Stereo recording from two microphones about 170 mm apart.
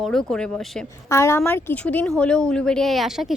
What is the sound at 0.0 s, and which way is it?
Speech, 5° left (ahead or behind).